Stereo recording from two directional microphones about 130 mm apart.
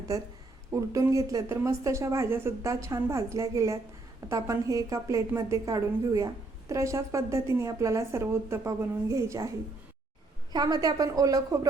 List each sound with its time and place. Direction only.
0.1 s a woman's voice: 25° right (ahead or behind)
10.5 s a woman's voice: 30° right (ahead or behind)